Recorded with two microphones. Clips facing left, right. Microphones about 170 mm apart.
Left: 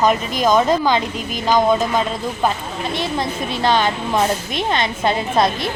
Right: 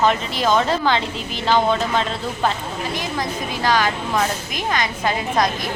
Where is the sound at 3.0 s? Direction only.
25° left (ahead or behind).